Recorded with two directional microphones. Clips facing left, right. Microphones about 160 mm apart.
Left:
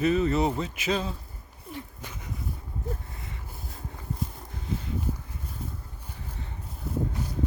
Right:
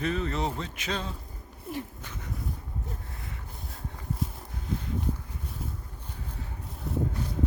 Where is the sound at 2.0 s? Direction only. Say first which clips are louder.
Left 1 dB; 10° left (ahead or behind).